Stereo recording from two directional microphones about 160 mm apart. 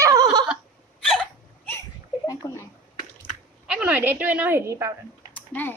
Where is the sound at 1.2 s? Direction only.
10° left (ahead or behind).